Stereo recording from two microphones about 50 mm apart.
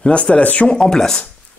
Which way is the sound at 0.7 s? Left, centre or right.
Centre.